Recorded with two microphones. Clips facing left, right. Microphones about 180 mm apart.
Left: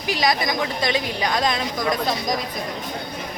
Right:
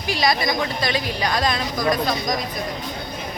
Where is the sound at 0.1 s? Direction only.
15° left (ahead or behind).